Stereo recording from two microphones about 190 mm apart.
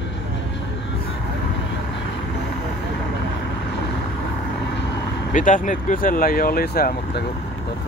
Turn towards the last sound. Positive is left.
turn(degrees=55)  # may be behind; listen again after turning